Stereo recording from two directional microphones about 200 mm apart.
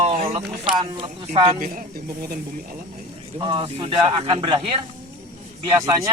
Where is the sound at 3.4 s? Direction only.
25° right (ahead or behind).